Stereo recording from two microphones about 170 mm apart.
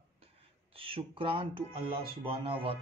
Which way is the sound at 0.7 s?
30° right (ahead or behind).